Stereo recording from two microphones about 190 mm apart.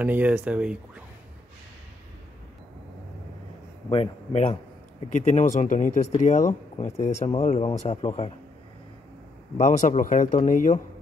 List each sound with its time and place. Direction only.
0.0 s speech: 10° right (ahead or behind)
3.9 s speech: 30° left (ahead or behind)
9.6 s speech: 40° left (ahead or behind)